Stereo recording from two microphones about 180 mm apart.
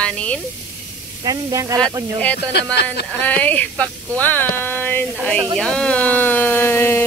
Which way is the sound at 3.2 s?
10° left (ahead or behind).